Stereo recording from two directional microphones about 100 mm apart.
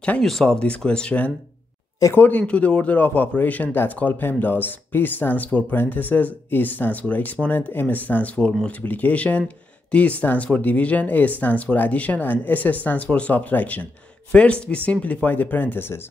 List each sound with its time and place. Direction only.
0.2 s a man's voice: 5° left (ahead or behind); by 16.0 s 20° left (ahead or behind)